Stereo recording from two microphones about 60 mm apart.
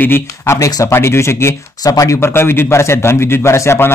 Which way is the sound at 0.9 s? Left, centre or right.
Left.